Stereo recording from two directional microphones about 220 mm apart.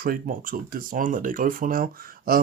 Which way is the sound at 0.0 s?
40° right (ahead or behind).